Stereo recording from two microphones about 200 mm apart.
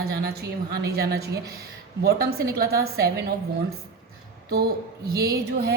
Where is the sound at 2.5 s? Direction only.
50° right (ahead or behind).